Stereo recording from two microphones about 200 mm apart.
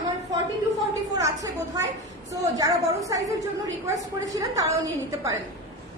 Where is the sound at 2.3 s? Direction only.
15° right (ahead or behind).